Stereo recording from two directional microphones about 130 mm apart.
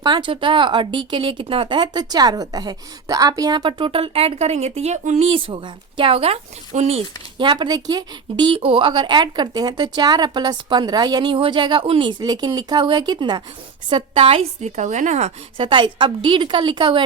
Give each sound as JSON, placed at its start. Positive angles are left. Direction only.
{"t": 0.0, "sound": "speech", "side_deg": -35}
{"t": 7.3, "sound": "a woman's voice", "side_deg": -40}
{"t": 14.8, "sound": "speech", "side_deg": -65}
{"t": 15.5, "sound": "speech", "side_deg": -40}